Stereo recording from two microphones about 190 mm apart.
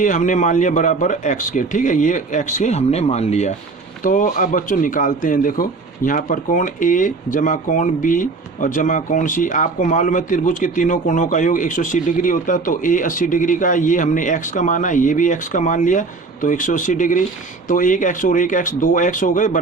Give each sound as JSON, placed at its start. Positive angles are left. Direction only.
{"t": 0.0, "sound": "a man's voice", "side_deg": 45}